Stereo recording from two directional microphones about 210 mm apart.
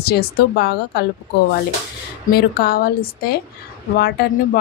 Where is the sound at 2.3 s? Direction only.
45° left (ahead or behind).